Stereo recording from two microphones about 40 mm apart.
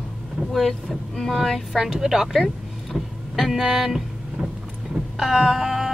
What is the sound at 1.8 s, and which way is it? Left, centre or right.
Speech, centre.